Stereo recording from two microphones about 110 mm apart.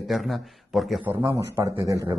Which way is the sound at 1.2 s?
25° right (ahead or behind).